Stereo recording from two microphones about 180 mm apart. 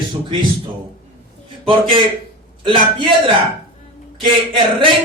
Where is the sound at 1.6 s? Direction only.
30° right (ahead or behind).